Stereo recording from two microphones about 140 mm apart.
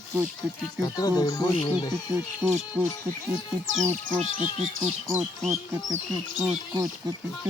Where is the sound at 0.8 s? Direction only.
25° left (ahead or behind).